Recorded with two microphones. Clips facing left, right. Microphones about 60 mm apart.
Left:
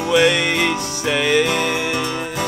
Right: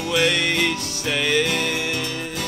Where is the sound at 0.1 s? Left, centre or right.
Centre.